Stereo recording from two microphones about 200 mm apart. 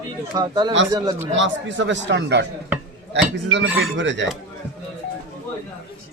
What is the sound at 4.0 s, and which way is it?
Speech, 65° right (ahead or behind).